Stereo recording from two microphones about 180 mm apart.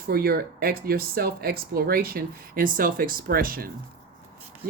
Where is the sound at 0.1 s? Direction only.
60° right (ahead or behind).